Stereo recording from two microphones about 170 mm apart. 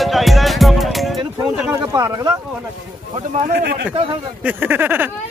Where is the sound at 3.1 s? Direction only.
40° right (ahead or behind).